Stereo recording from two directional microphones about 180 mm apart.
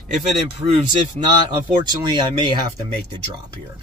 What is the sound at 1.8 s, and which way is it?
Speech, 25° right (ahead or behind).